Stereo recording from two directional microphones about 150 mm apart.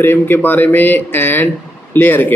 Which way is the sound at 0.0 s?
15° left (ahead or behind).